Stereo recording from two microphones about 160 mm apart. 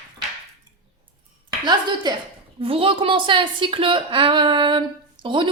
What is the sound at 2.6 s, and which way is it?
A woman's voice, 35° right (ahead or behind).